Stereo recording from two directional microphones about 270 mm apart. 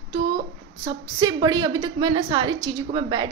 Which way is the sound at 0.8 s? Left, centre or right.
Centre.